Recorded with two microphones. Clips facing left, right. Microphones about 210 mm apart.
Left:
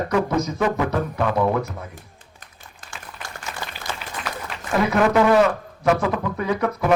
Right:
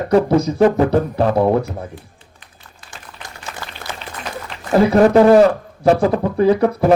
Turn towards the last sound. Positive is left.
turn(degrees=-35)  # may be behind; listen again after turning